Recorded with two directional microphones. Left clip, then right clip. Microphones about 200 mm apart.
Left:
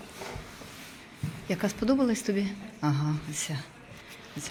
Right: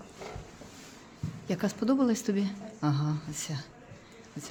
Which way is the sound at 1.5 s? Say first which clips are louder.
Left 2 dB; 15° right (ahead or behind).